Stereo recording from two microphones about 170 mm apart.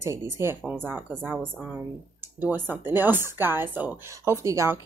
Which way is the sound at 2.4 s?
10° right (ahead or behind).